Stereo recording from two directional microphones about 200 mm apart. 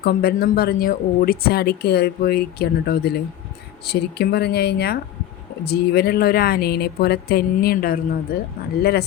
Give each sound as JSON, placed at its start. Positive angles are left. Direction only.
{"t": 0.0, "sound": "speech", "side_deg": 50}